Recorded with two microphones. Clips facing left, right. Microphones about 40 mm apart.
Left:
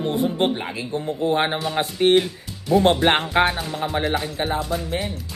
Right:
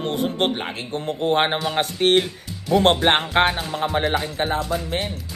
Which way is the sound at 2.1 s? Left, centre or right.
Right.